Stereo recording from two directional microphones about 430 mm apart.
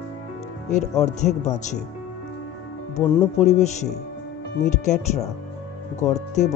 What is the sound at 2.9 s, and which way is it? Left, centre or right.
Speech, centre.